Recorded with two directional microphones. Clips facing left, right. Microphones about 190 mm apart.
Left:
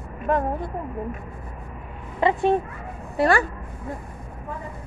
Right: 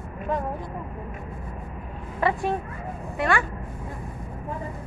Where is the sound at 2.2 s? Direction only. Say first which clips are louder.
Left 3 dB; 20° left (ahead or behind).